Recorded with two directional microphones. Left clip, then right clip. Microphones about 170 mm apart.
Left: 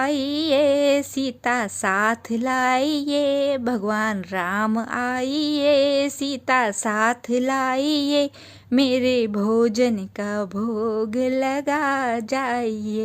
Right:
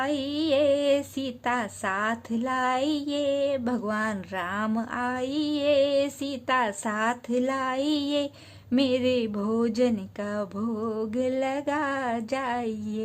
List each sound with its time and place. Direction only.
0.0 s speech: 30° left (ahead or behind)